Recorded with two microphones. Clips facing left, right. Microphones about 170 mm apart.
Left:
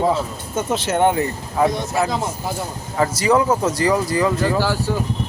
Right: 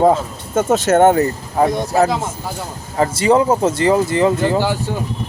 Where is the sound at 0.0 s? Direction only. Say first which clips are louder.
Right 5 dB; 50° right (ahead or behind).